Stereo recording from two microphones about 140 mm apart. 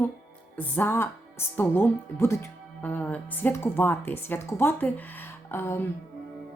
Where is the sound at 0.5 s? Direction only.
10° left (ahead or behind).